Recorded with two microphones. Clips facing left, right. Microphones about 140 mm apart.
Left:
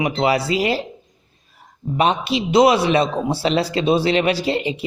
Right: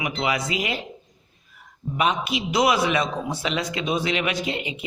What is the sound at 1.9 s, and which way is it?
A man's voice, 30° left (ahead or behind).